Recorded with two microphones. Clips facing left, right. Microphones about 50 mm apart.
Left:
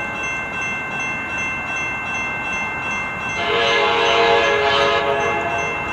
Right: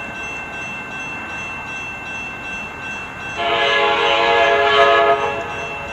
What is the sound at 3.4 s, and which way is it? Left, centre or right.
Train horn, centre.